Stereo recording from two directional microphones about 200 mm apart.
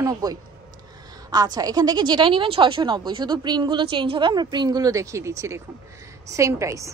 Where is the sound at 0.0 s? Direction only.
20° right (ahead or behind).